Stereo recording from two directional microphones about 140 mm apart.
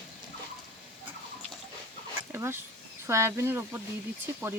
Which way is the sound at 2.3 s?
20° right (ahead or behind).